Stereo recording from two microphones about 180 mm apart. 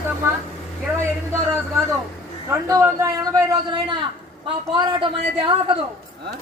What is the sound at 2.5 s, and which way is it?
A man's voice, 15° right (ahead or behind).